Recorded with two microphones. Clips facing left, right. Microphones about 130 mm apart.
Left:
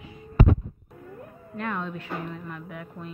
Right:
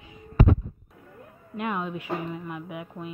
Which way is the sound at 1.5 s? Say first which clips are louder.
Right 2 dB; 15° right (ahead or behind).